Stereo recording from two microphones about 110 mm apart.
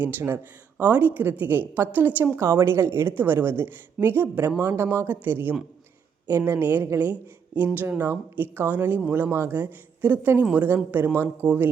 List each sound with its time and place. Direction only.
0.0 s a woman's voice: 20° right (ahead or behind)
4.6 s a woman's voice: 30° right (ahead or behind)
4.9 s a woman's voice: 20° right (ahead or behind)